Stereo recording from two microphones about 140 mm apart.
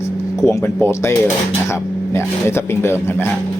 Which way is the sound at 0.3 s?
20° left (ahead or behind).